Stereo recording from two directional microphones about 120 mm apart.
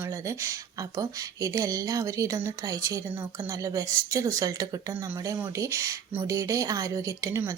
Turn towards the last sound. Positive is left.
turn(degrees=-25)  # may be behind; listen again after turning